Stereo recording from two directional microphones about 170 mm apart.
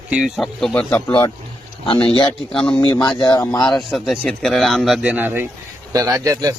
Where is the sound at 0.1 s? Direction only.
5° right (ahead or behind).